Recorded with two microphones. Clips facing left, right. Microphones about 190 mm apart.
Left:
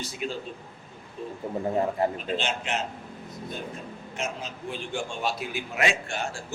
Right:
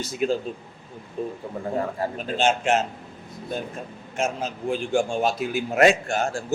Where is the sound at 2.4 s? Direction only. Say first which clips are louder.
Right 9 dB; 45° right (ahead or behind).